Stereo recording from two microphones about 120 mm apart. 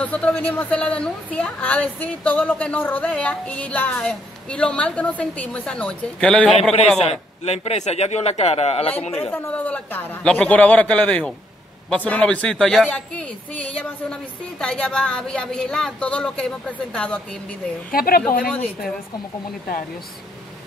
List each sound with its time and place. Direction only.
0.0 s a woman's voice: 10° left (ahead or behind)
7.0 s a man's voice: 60° left (ahead or behind)
9.3 s a woman's voice: 15° left (ahead or behind)